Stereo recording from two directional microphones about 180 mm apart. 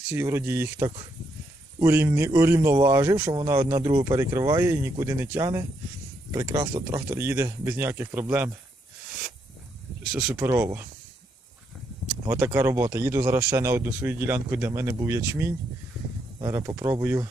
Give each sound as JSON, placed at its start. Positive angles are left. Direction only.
{"t": 0.1, "sound": "speech", "side_deg": -15}
{"t": 10.2, "sound": "speech", "side_deg": -15}
{"t": 12.2, "sound": "speech", "side_deg": -15}